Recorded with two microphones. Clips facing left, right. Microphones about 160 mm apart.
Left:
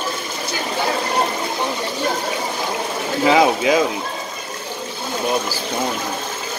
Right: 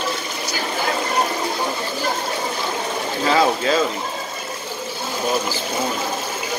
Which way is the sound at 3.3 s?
15° left (ahead or behind).